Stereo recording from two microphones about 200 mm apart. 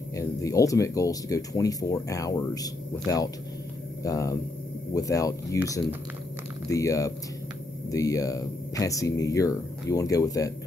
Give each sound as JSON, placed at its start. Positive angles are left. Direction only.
{"t": 0.1, "sound": "speech", "side_deg": 15}
{"t": 6.7, "sound": "speech", "side_deg": 15}